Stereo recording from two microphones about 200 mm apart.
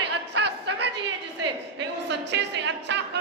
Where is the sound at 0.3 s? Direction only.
60° right (ahead or behind).